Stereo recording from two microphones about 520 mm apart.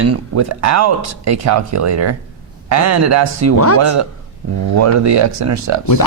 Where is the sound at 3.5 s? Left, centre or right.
Left.